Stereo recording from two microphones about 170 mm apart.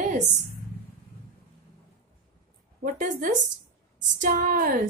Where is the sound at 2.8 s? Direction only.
50° right (ahead or behind).